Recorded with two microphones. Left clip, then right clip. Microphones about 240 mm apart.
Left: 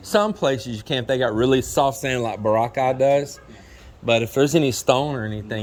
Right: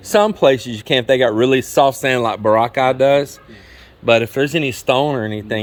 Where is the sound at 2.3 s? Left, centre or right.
Right.